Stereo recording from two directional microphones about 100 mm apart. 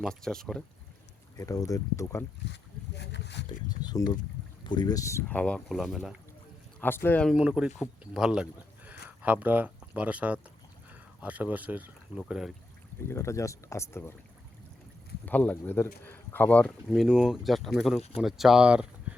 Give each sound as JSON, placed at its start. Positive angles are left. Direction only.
{"t": 0.0, "sound": "speech", "side_deg": 5}
{"t": 1.4, "sound": "speech", "side_deg": 35}
{"t": 3.8, "sound": "speech", "side_deg": 40}
{"t": 5.3, "sound": "speech", "side_deg": 10}
{"t": 5.6, "sound": "speech", "side_deg": 0}
{"t": 6.7, "sound": "speech", "side_deg": 20}
{"t": 7.3, "sound": "speech", "side_deg": -10}
{"t": 12.1, "sound": "speech", "side_deg": -5}
{"t": 13.1, "sound": "speech", "side_deg": 30}
{"t": 15.3, "sound": "speech", "side_deg": 15}
{"t": 16.9, "sound": "speech", "side_deg": -5}